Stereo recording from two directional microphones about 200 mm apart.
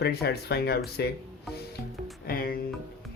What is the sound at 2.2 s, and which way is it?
Speech, 50° left (ahead or behind).